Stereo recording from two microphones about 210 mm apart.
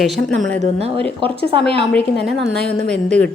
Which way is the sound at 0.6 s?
30° right (ahead or behind).